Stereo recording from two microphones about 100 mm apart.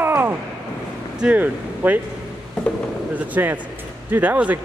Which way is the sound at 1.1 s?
10° right (ahead or behind).